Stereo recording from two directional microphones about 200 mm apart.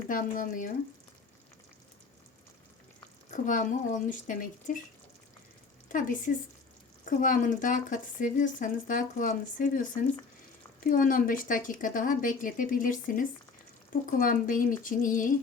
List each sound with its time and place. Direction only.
0.1 s a woman's voice: 45° left (ahead or behind)
3.3 s speech: 40° left (ahead or behind)
5.9 s a woman's voice: 40° left (ahead or behind)